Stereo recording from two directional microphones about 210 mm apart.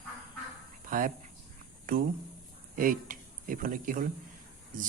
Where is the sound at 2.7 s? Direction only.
40° right (ahead or behind).